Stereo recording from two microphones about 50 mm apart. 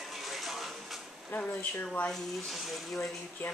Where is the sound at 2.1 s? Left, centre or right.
Centre.